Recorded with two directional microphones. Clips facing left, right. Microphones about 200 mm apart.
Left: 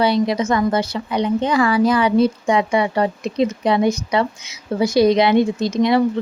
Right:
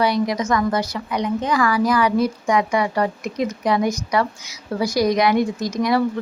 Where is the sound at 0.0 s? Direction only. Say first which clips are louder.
Left 3 dB; 25° left (ahead or behind).